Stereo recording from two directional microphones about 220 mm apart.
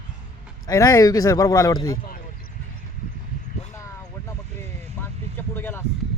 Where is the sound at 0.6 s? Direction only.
15° left (ahead or behind).